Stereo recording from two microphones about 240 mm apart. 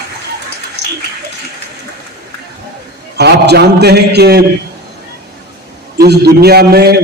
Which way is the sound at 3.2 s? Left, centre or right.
Right.